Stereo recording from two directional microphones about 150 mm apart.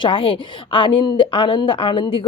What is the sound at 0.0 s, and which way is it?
A woman's voice, 35° left (ahead or behind).